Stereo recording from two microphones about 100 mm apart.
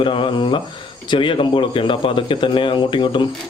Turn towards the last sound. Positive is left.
turn(degrees=55)  # may be behind; listen again after turning